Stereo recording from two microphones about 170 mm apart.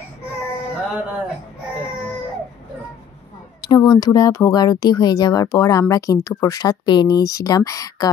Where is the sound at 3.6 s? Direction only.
25° left (ahead or behind).